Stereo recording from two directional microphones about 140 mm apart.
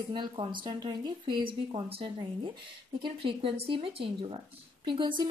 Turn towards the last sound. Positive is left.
turn(degrees=-35)  # may be behind; listen again after turning